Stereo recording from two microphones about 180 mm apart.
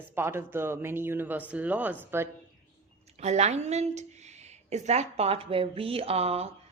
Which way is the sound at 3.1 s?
35° right (ahead or behind).